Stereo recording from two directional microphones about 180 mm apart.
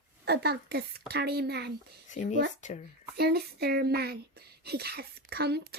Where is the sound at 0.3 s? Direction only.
65° right (ahead or behind).